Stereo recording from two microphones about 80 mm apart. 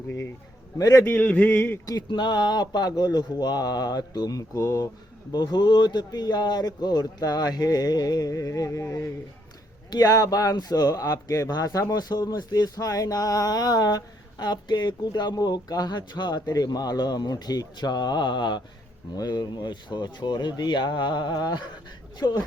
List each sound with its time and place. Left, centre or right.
0.8 s a man's voice: left
1.0 s speech: left
2.0 s speech: left
5.3 s speech: left
9.9 s speech: left
19.1 s speech: left
22.2 s speech: left